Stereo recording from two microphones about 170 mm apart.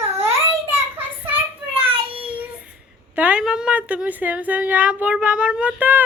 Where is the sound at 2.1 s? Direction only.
10° right (ahead or behind).